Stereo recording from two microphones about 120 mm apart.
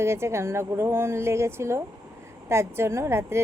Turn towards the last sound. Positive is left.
turn(degrees=-20)  # may be behind; listen again after turning